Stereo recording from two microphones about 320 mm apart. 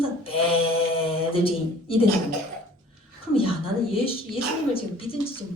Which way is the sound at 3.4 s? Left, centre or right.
Centre.